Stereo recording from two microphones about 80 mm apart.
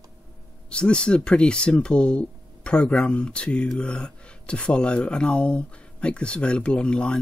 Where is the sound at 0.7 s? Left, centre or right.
Centre.